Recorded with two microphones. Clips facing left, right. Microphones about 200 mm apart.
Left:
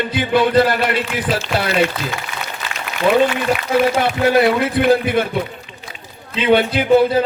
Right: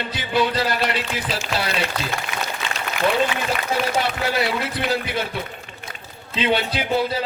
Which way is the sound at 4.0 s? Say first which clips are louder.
Left 8 dB; 55° left (ahead or behind).